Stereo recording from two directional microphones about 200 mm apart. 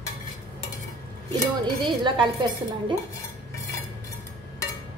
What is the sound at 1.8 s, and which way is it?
Speech, 25° right (ahead or behind).